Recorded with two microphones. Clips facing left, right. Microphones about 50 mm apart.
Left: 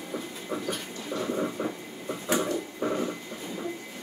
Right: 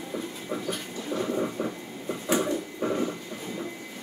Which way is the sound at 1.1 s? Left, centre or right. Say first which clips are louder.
Right 1 dB; centre.